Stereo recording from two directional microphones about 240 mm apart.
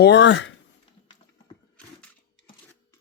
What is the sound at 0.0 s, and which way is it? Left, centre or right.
Speech, left.